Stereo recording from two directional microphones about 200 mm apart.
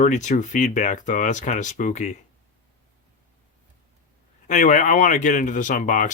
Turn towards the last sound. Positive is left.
turn(degrees=40)  # may be behind; listen again after turning